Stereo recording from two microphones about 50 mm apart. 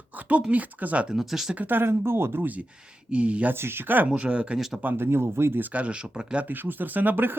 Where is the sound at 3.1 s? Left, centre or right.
Right.